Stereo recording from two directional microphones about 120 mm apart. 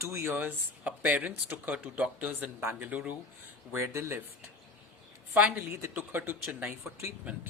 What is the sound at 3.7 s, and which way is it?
Speech, 25° right (ahead or behind).